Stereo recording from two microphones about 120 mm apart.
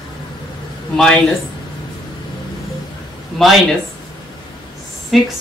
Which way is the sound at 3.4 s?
5° left (ahead or behind).